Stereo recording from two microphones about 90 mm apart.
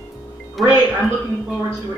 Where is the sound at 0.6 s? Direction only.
Centre (ahead or behind).